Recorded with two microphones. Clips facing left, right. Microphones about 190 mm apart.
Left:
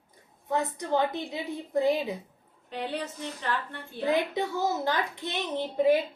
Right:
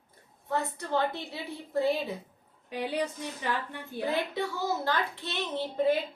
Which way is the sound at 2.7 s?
10° right (ahead or behind).